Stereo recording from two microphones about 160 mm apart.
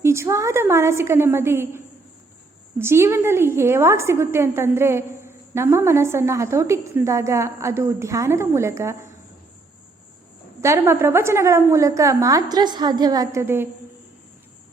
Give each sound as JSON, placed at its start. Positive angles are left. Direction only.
{"t": 0.0, "sound": "a woman's voice", "side_deg": -15}
{"t": 10.6, "sound": "a woman's voice", "side_deg": -15}